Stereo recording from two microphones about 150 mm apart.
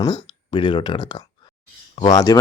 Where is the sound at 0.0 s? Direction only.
30° left (ahead or behind).